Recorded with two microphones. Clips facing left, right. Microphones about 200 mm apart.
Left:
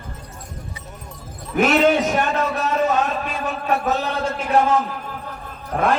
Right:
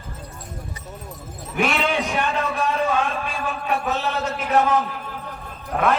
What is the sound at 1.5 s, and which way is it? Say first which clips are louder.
Basketball bounce: left 6 dB; 40° left (ahead or behind).